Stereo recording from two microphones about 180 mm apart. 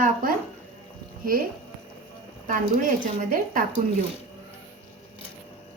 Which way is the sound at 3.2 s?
50° right (ahead or behind).